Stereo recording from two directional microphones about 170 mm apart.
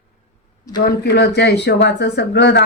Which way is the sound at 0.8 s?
80° left.